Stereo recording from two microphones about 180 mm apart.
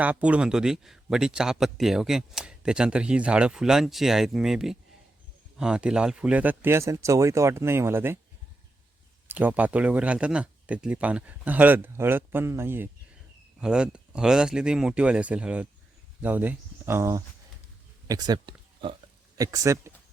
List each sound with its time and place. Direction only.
0.0 s speech: 5° right (ahead or behind)
9.2 s speech: 10° right (ahead or behind)